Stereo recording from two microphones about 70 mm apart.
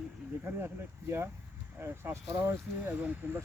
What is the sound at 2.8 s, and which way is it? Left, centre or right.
Speech, right.